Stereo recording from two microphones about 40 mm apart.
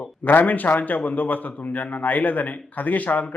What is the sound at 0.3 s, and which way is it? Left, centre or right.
A man's voice, left.